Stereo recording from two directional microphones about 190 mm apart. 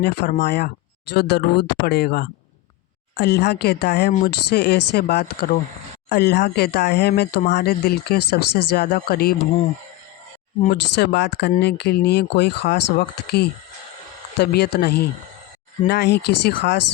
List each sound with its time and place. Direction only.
0.0 s speech: 60° left (ahead or behind)
10.9 s speech: 65° left (ahead or behind)